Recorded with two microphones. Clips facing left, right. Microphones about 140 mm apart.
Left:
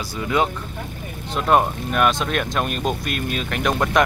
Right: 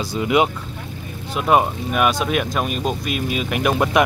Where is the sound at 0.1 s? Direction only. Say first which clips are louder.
Right 3 dB; 15° right (ahead or behind).